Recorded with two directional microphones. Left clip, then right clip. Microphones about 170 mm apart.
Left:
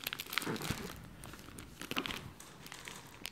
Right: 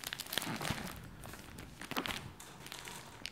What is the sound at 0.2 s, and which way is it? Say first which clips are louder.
Crumpling: even; centre (ahead or behind).